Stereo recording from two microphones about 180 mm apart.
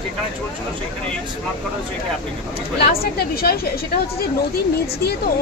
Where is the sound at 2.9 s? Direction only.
55° left (ahead or behind).